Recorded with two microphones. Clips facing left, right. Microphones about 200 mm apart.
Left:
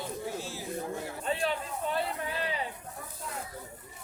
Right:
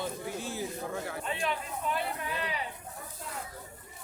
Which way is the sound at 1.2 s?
35° left (ahead or behind).